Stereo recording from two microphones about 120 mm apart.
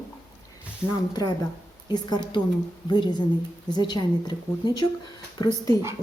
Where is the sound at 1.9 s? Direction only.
35° left (ahead or behind).